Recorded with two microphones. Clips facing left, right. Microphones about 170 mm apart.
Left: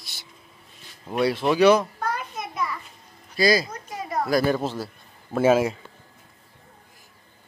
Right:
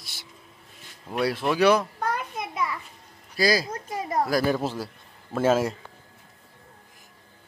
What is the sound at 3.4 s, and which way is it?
A man's voice, 5° right (ahead or behind).